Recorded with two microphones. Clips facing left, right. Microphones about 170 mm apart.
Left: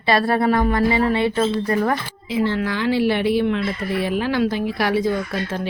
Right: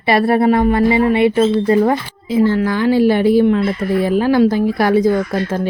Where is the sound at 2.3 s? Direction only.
45° right (ahead or behind).